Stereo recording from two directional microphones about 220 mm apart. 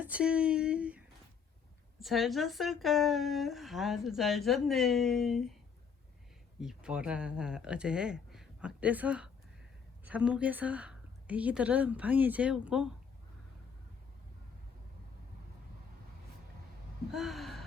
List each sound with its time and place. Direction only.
0.0 s speech: 5° right (ahead or behind)
6.6 s a woman's voice: 5° right (ahead or behind)
17.1 s gasp: centre (ahead or behind)